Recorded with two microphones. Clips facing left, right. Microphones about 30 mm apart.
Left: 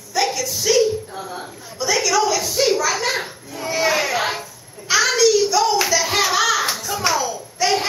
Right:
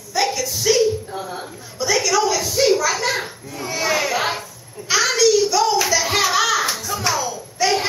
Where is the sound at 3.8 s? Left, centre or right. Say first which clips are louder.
Left 1 dB; left.